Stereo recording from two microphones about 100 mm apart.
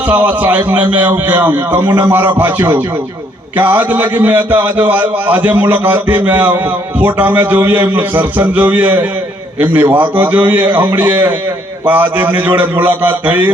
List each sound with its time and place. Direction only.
0.1 s a man's voice: 15° right (ahead or behind)